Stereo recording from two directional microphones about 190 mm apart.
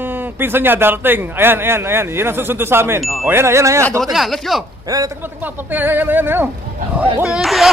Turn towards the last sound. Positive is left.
turn(degrees=0)  # may be behind; listen again after turning